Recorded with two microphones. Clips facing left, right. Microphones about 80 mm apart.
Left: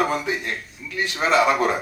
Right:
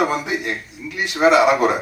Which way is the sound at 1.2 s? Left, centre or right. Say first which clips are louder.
Right 5 dB; centre.